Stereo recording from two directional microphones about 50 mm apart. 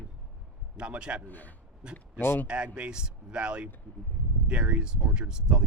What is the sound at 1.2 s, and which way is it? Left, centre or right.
Speech, left.